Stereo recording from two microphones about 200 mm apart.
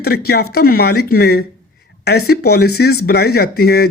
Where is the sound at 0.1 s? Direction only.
55° left (ahead or behind).